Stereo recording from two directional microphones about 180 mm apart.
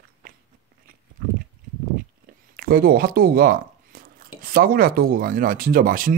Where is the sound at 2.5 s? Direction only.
55° right (ahead or behind).